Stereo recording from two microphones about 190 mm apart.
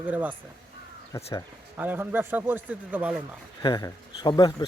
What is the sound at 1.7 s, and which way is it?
Speech, 10° right (ahead or behind).